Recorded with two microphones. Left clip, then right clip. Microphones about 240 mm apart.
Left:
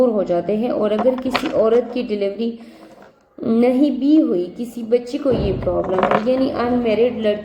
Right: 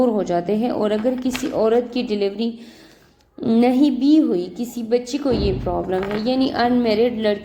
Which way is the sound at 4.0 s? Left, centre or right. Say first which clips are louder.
Left 1 dB; right.